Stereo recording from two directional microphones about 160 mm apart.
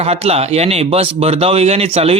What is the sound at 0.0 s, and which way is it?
Speech, 40° right (ahead or behind).